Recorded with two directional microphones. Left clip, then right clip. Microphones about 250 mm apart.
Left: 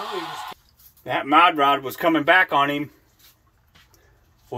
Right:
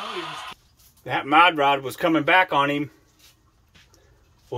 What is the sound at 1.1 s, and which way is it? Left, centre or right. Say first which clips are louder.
Speech: left 1 dB; centre.